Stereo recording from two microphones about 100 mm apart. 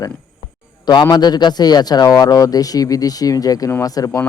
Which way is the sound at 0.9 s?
45° left (ahead or behind).